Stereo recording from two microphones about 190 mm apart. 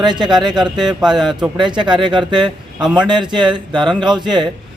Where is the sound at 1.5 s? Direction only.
25° right (ahead or behind).